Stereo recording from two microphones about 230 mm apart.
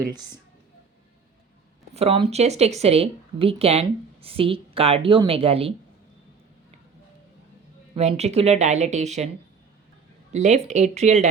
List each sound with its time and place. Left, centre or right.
1.9 s speech: right
7.9 s speech: right
10.3 s speech: right